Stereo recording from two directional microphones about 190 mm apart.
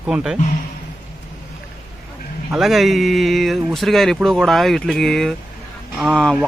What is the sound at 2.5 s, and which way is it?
Speech, centre (ahead or behind).